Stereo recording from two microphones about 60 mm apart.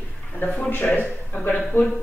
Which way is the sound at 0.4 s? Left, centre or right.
Left.